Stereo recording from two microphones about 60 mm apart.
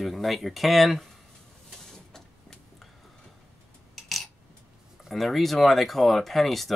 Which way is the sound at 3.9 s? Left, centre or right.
Centre.